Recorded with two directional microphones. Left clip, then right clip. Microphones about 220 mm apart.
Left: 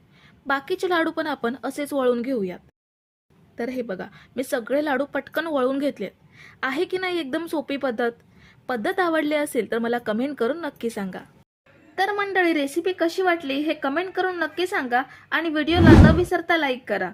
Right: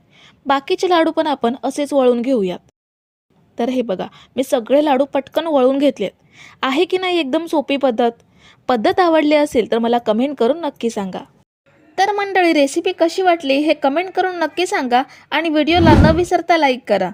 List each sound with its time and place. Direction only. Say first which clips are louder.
0.2 s a woman's voice: right 8 dB; 25° right (ahead or behind)
15.8 s a woman's voice: right 1 dB; centre (ahead or behind)
16.2 s a woman's voice: right 8 dB; 30° right (ahead or behind)